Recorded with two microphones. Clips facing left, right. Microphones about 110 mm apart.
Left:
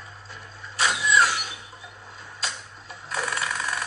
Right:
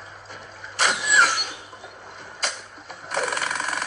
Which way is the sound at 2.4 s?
50° right (ahead or behind).